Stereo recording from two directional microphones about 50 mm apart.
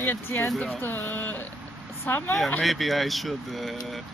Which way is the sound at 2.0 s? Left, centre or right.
Left.